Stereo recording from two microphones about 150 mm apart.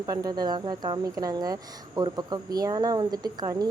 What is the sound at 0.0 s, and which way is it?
Speech, 25° right (ahead or behind).